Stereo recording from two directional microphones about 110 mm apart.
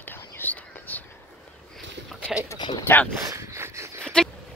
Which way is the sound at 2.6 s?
45° left (ahead or behind).